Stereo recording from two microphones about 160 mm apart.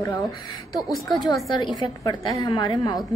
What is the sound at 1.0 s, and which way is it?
A woman's voice, 25° left (ahead or behind).